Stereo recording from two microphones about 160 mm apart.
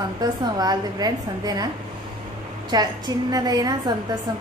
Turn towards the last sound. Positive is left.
turn(degrees=-25)  # may be behind; listen again after turning